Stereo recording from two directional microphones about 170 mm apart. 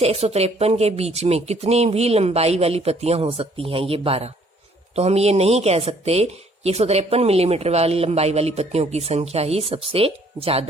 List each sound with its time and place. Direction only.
0.0 s speech: 35° right (ahead or behind)